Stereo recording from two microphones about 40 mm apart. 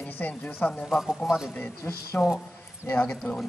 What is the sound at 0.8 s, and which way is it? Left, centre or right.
Speech, centre.